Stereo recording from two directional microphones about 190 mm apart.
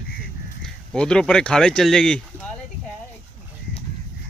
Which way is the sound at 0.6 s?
5° left (ahead or behind).